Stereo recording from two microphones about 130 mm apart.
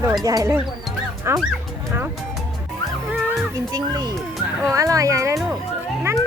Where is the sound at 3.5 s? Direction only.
30° right (ahead or behind).